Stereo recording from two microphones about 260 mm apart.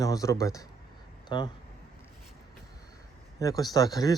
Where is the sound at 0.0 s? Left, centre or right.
Centre.